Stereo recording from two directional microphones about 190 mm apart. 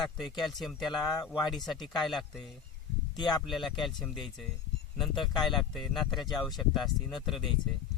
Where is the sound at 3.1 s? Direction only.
25° left (ahead or behind).